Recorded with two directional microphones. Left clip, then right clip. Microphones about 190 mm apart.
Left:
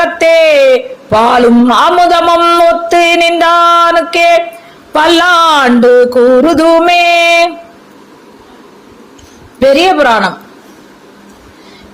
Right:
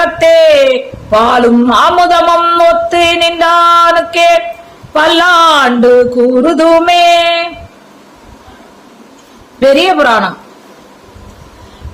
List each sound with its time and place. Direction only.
0.0 s a sound: 30° left (ahead or behind)
1.1 s a man's voice: 30° left (ahead or behind)
9.6 s a man's voice: 25° left (ahead or behind)